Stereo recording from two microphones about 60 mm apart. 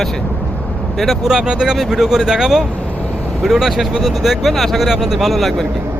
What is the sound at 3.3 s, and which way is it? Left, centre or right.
Speech, centre.